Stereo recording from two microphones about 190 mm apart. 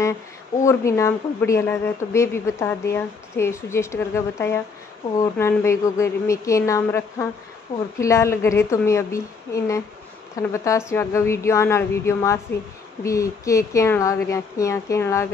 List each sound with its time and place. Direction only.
0.6 s speech: 15° left (ahead or behind)